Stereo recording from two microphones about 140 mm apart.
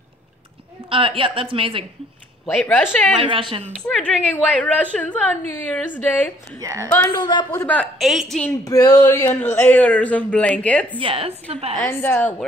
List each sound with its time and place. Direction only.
0.8 s a woman's voice: 40° right (ahead or behind)
2.4 s speech: 15° left (ahead or behind)
3.2 s a woman's voice: 40° right (ahead or behind)
3.7 s speech: 5° left (ahead or behind)
6.6 s a woman's voice: 20° right (ahead or behind)
7.1 s a man's voice: 30° left (ahead or behind)
7.6 s speech: 10° left (ahead or behind)
8.0 s a woman's voice: centre (ahead or behind)
8.6 s speech: 25° left (ahead or behind); by 11.0 s 10° left (ahead or behind)
11.0 s a woman's voice: 40° right (ahead or behind)
11.8 s speech: 15° left (ahead or behind)